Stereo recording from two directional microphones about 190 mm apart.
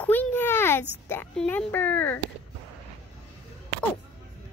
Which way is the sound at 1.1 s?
10° left (ahead or behind).